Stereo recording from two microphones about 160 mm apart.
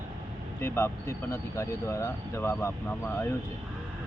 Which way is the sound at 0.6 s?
15° left (ahead or behind).